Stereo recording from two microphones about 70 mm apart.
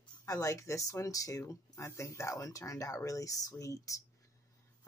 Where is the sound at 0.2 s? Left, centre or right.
Left.